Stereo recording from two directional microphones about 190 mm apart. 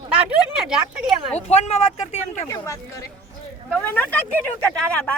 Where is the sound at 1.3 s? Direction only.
35° left (ahead or behind).